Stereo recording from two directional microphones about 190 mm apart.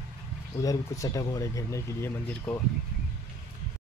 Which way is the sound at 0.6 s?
15° left (ahead or behind).